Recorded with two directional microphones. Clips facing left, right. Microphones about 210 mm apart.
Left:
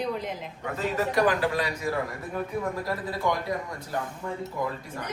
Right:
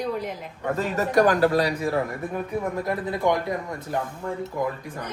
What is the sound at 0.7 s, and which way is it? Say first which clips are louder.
A man's voice: right 4 dB; 45° right (ahead or behind).